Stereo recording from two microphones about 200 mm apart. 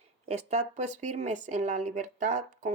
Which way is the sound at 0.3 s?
35° right (ahead or behind).